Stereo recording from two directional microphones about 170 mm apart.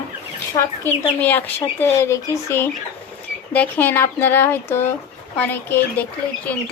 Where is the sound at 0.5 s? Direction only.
25° left (ahead or behind).